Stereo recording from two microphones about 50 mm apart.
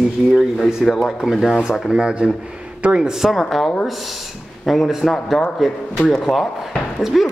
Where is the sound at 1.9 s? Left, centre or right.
Centre.